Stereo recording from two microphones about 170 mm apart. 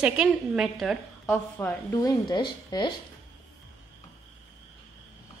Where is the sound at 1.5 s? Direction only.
20° left (ahead or behind).